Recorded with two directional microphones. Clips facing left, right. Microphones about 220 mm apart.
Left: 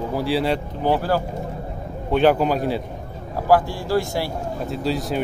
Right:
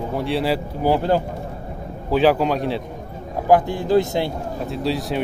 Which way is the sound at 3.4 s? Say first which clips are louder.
Right 2 dB; 20° right (ahead or behind).